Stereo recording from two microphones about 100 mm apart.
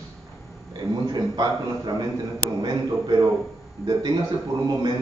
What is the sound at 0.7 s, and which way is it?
A man's voice, 45° right (ahead or behind).